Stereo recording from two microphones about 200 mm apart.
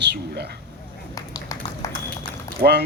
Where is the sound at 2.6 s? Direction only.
45° right (ahead or behind).